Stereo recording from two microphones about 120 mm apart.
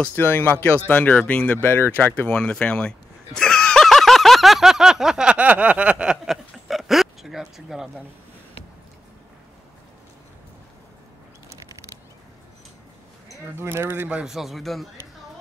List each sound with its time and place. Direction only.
0.0 s speech: 15° left (ahead or behind); by 8.0 s 5° right (ahead or behind)
13.6 s speech: 20° right (ahead or behind); by 14.9 s centre (ahead or behind)